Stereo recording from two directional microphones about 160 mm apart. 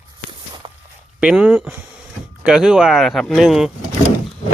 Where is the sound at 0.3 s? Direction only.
30° right (ahead or behind).